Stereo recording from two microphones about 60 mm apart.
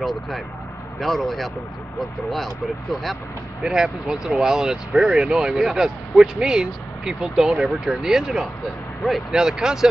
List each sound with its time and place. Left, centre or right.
0.0 s speech: centre
3.6 s speech: centre